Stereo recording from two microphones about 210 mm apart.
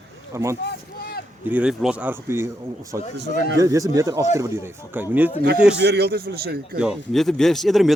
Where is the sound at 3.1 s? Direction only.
55° right (ahead or behind).